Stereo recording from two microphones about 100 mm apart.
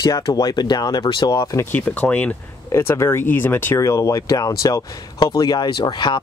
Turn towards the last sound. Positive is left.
turn(degrees=50)  # may be behind; listen again after turning